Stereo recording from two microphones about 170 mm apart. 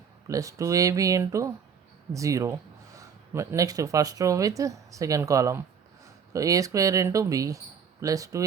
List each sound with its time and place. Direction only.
0.3 s speech: 20° right (ahead or behind)